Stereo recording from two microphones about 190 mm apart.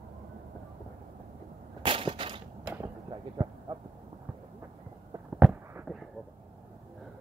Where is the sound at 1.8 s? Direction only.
30° right (ahead or behind).